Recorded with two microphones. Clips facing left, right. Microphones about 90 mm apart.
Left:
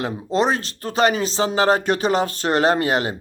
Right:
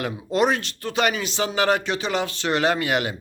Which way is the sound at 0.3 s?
30° left (ahead or behind).